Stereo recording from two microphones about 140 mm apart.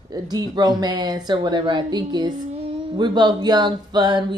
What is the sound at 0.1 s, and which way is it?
Speech, 30° right (ahead or behind).